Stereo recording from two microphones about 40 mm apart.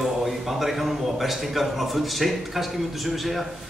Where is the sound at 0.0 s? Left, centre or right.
Centre.